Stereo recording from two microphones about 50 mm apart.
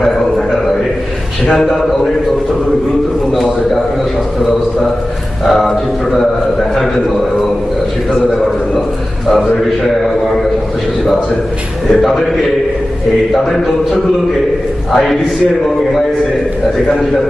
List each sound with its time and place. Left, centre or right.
1.5 s a man's voice: centre
5.4 s a sound: centre
11.9 s a man's voice: centre
14.9 s a man's voice: centre